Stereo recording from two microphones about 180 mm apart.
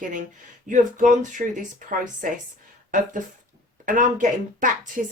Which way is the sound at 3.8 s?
50° right (ahead or behind).